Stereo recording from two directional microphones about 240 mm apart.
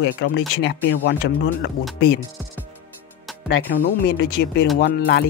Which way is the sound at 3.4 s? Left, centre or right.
Left.